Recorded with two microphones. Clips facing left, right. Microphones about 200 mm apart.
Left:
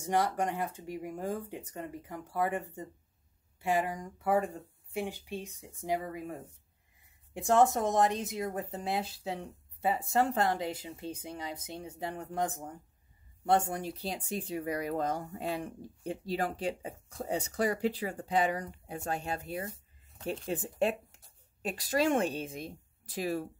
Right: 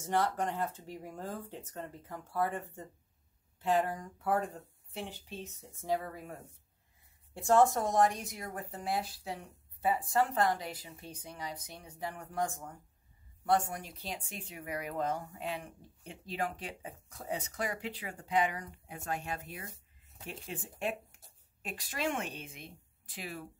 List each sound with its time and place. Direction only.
0.0 s speech: 15° left (ahead or behind)
7.3 s speech: 20° left (ahead or behind); by 23.5 s 40° left (ahead or behind)